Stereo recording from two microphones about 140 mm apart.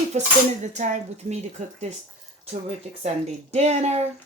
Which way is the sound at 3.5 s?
50° right (ahead or behind).